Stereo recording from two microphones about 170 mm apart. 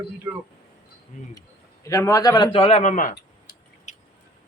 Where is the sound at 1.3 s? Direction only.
20° left (ahead or behind); by 3.2 s 50° left (ahead or behind).